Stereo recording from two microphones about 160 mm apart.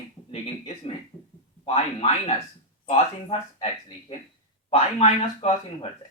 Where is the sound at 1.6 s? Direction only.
45° left (ahead or behind).